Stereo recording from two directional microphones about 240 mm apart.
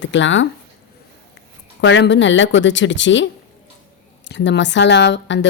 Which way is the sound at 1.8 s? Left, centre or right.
Left.